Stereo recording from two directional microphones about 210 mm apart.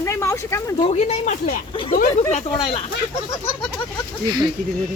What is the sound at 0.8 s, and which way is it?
Speech, 30° left (ahead or behind).